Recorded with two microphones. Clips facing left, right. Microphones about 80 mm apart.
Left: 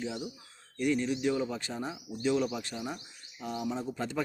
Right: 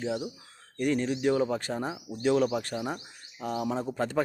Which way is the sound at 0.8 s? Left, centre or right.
Right.